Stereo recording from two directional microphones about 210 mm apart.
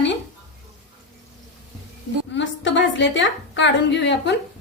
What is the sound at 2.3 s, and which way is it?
A woman's voice, 60° left (ahead or behind).